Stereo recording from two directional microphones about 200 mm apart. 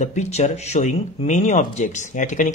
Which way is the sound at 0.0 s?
35° left (ahead or behind).